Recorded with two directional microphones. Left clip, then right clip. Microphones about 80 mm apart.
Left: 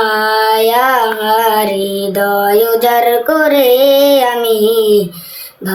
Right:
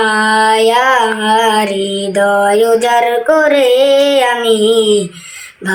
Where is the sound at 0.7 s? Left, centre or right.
Centre.